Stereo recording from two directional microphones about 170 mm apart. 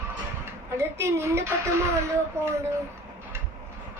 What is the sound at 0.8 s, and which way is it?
Speech, 15° right (ahead or behind).